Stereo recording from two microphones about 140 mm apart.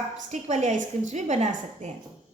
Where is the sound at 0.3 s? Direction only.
55° right (ahead or behind).